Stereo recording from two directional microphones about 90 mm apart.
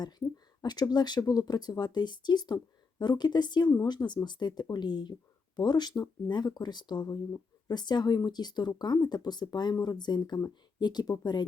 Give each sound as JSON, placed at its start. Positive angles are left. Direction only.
{"t": 0.6, "sound": "speech", "side_deg": 50}